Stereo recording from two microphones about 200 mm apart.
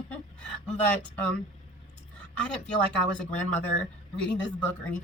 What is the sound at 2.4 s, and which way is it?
A woman's voice, 5° left (ahead or behind).